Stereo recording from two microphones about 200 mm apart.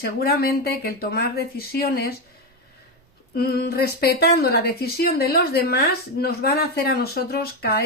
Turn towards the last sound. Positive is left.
turn(degrees=50)  # may be behind; listen again after turning